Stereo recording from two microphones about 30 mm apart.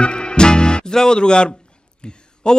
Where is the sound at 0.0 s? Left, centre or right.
Left.